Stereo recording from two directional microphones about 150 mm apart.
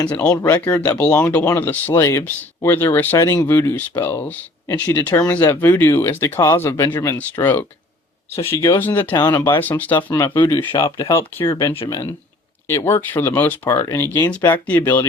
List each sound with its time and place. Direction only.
0.0 s speech: 10° left (ahead or behind)
0.3 s speech: 20° left (ahead or behind)
0.6 s speech: 10° left (ahead or behind)
9.1 s speech: 25° left (ahead or behind)
9.4 s speech: 15° left (ahead or behind)
10.6 s speech: 30° left (ahead or behind); by 14.8 s 15° left (ahead or behind)